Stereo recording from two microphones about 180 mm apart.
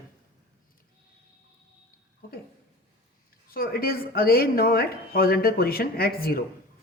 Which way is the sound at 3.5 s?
55° left (ahead or behind).